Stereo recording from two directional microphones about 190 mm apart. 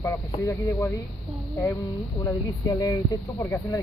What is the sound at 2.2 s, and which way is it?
Speech, 20° left (ahead or behind).